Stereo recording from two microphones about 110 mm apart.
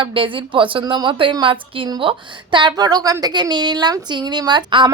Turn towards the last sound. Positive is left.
turn(degrees=-45)  # may be behind; listen again after turning